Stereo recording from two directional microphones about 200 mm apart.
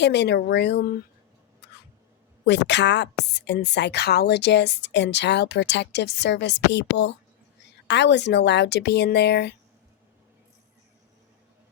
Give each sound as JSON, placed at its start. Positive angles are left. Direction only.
{"t": 0.0, "sound": "a woman's voice", "side_deg": 60}
{"t": 1.6, "sound": "a sound", "side_deg": 60}
{"t": 2.5, "sound": "a woman's voice", "side_deg": 60}